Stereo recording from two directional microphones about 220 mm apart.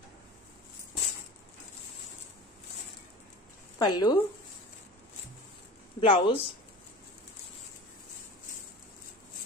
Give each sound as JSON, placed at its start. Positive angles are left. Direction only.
{"t": 3.7, "sound": "speech", "side_deg": 20}
{"t": 5.9, "sound": "speech", "side_deg": 20}